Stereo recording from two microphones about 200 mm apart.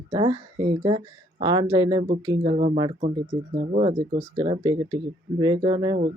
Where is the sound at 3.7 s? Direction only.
35° right (ahead or behind).